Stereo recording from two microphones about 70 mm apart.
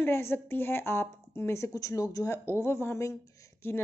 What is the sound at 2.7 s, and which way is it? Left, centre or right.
A woman's voice, left.